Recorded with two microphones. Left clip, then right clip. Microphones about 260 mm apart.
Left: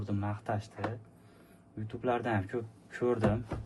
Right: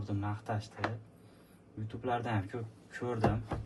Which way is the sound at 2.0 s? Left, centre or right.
Left.